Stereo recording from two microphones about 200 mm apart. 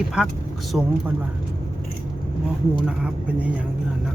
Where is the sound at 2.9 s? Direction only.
5° right (ahead or behind).